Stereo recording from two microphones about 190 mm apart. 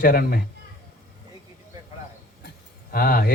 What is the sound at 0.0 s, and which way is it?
Speech, 50° left (ahead or behind).